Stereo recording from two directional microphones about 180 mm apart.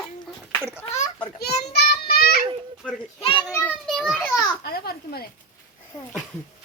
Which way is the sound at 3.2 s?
25° left (ahead or behind).